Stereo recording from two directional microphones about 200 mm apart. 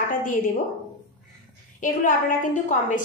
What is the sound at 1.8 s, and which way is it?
A woman's voice, 40° left (ahead or behind).